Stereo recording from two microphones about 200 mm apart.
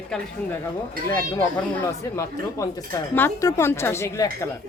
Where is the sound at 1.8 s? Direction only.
15° left (ahead or behind).